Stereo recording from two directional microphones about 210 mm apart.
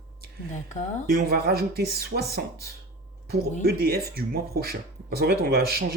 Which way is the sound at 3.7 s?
50° right (ahead or behind).